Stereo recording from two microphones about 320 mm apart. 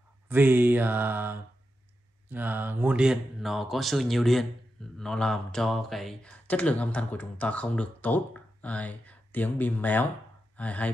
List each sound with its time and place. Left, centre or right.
0.3 s mantra: centre
2.2 s speech: centre